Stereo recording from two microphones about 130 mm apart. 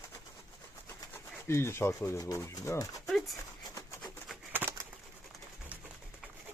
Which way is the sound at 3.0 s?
Centre (ahead or behind).